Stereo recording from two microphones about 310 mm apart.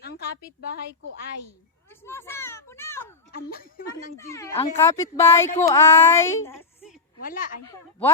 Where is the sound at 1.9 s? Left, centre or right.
Centre.